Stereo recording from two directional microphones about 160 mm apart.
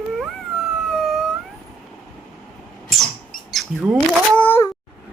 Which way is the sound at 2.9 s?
Centre (ahead or behind).